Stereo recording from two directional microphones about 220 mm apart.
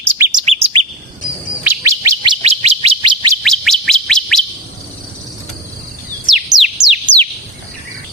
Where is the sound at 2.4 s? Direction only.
30° right (ahead or behind).